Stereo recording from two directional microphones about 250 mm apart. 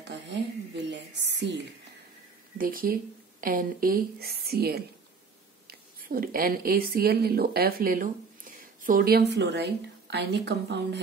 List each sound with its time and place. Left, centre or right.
0.9 s a woman's voice: right